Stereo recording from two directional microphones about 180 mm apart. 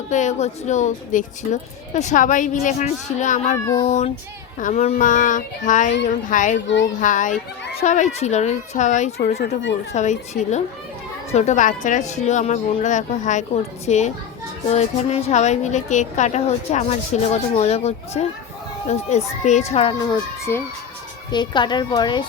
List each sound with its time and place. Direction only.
0.1 s a woman's voice: 40° left (ahead or behind)
9.4 s speech: 80° left
9.9 s a woman's voice: 40° left (ahead or behind)
20.5 s speech: 15° left (ahead or behind)
21.2 s a woman's voice: 25° left (ahead or behind)